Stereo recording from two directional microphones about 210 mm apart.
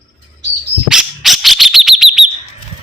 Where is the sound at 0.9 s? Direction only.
Centre (ahead or behind).